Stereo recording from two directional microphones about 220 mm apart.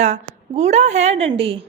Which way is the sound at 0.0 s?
30° right (ahead or behind).